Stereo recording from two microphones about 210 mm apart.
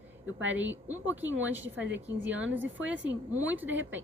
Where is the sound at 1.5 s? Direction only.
60° right (ahead or behind).